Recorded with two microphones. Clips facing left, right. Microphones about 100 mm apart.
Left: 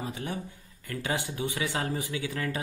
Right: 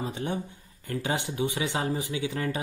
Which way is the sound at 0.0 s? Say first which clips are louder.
Right 3 dB; 25° right (ahead or behind).